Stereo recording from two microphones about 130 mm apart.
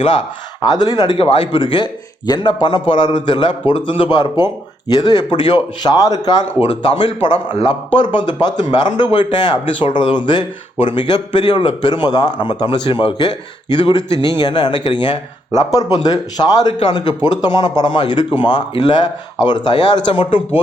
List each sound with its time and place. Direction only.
0.6 s speech: 30° left (ahead or behind)
1.2 s speech: 45° left (ahead or behind); by 6.4 s 30° left (ahead or behind)
6.6 s speech: 45° left (ahead or behind)